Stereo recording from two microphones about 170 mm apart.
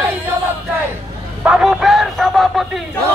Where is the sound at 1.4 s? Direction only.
5° right (ahead or behind).